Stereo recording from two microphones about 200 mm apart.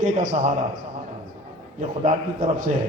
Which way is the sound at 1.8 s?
40° right (ahead or behind).